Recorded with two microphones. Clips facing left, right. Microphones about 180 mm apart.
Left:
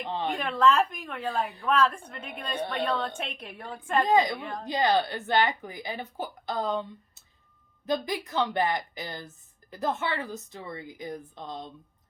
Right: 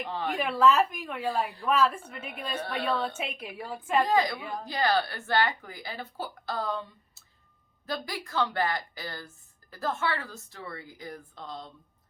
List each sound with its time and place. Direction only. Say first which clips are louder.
0.3 s a woman's voice: right 1 dB; 5° right (ahead or behind)
4.0 s speech: left 4 dB; 20° left (ahead or behind)
4.4 s a woman's voice: even; 5° right (ahead or behind)
4.6 s speech: left 2 dB; 20° left (ahead or behind)